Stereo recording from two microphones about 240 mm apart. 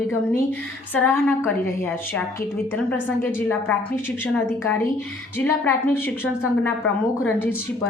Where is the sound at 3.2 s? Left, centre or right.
Centre.